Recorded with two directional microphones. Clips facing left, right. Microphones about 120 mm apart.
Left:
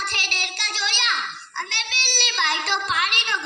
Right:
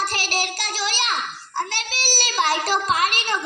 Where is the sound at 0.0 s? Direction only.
35° right (ahead or behind).